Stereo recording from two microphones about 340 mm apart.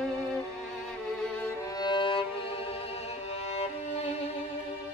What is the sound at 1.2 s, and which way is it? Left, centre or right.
Music, centre.